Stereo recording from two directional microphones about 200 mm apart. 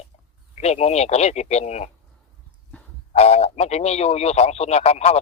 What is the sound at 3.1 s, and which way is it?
A man's voice, 30° left (ahead or behind).